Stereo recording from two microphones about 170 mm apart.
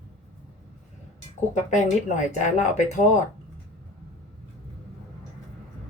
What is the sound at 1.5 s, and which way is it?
Speech, 45° left (ahead or behind).